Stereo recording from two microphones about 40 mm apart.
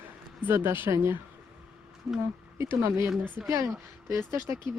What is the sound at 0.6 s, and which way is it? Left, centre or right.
Speech, right.